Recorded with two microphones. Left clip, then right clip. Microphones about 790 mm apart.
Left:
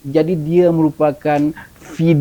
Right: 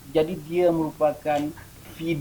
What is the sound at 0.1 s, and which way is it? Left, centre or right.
Speech, left.